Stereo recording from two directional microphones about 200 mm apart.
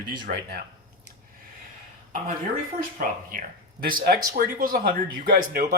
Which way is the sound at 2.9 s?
45° right (ahead or behind).